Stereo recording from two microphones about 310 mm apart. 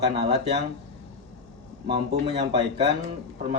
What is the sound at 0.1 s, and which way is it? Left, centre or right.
Speech, centre.